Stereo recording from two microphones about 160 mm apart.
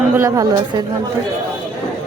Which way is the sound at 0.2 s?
20° right (ahead or behind).